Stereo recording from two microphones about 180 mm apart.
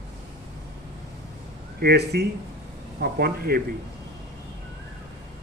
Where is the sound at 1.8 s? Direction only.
65° right (ahead or behind).